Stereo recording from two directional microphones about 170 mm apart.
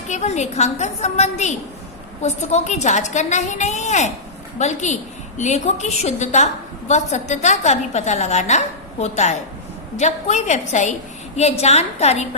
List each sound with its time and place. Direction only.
0.1 s a woman's voice: 40° left (ahead or behind)